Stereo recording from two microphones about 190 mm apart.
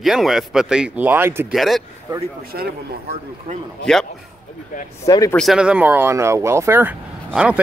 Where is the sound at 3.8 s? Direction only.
5° left (ahead or behind).